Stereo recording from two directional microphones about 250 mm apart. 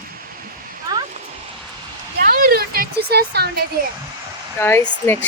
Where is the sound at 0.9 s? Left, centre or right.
Centre.